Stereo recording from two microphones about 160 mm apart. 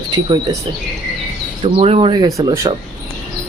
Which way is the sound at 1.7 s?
35° right (ahead or behind).